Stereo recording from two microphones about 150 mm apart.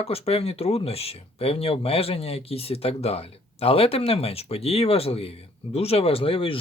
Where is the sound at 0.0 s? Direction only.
40° left (ahead or behind).